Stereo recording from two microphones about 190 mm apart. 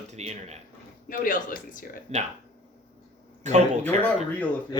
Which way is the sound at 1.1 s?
45° left (ahead or behind).